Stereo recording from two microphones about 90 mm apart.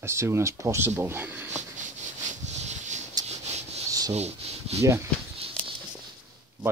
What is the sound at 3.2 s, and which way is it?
Rub, 45° right (ahead or behind).